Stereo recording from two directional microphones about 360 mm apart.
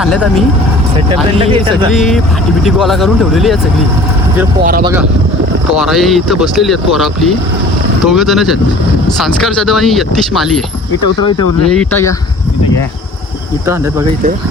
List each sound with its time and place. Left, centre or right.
0.0 s speech: centre
0.9 s speech: centre
1.9 s speech: centre
4.6 s speech: right
5.7 s speech: centre
11.2 s speech: centre